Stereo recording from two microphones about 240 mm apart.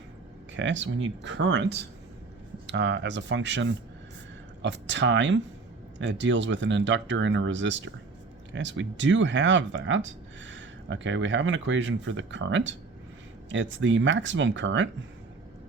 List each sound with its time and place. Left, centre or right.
0.5 s speech: right